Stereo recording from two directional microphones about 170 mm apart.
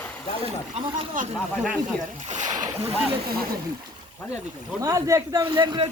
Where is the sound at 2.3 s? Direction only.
45° right (ahead or behind).